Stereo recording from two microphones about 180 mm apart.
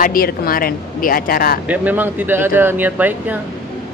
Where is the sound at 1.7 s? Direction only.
10° right (ahead or behind).